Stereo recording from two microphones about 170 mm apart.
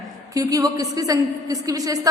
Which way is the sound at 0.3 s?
20° right (ahead or behind).